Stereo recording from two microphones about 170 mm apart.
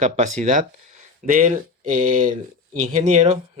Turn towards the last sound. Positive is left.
turn(degrees=-45)  # may be behind; listen again after turning